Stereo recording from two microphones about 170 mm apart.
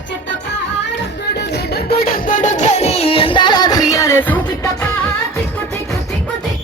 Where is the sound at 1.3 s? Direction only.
80° left; by 4.4 s 10° left (ahead or behind).